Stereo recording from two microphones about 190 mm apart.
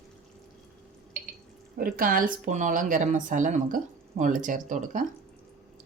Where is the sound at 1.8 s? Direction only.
50° right (ahead or behind).